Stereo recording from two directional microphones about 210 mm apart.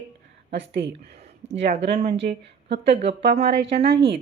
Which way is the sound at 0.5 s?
55° right (ahead or behind).